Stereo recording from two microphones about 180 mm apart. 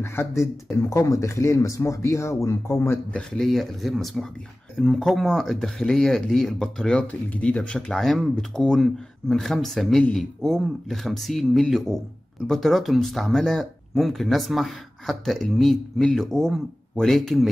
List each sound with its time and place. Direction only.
0.0 s speech: 15° left (ahead or behind)